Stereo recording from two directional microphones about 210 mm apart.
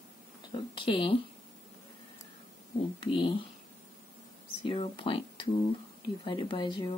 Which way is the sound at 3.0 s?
25° left (ahead or behind).